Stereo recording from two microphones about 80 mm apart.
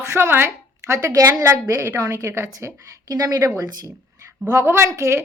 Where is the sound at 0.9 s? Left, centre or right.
Right.